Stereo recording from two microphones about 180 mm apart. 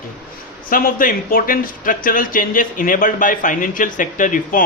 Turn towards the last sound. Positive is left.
turn(degrees=45)  # may be behind; listen again after turning